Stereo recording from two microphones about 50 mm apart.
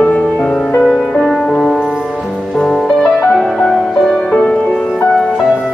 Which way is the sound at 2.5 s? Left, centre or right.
Centre.